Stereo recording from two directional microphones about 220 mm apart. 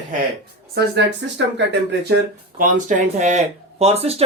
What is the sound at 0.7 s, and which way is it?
Speech, 50° right (ahead or behind).